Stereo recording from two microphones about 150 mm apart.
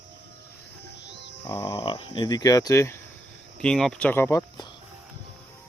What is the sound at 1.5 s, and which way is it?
Speech, 20° left (ahead or behind).